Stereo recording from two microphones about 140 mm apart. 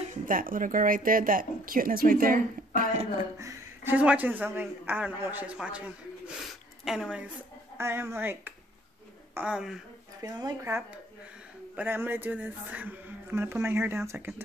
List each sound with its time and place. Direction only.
0.2 s speech: 80° right
3.3 s a sound: 20° right (ahead or behind)
3.9 s a man's voice: 10° right (ahead or behind)
7.7 s a man's voice: 20° right (ahead or behind)
10.2 s speech: 25° right (ahead or behind)
11.7 s a man's voice: 10° right (ahead or behind)